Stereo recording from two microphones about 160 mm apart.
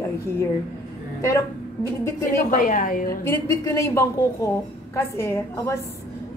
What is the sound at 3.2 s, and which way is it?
A woman's voice, 15° left (ahead or behind).